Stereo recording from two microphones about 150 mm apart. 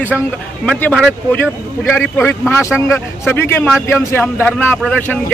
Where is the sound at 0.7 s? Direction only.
10° left (ahead or behind).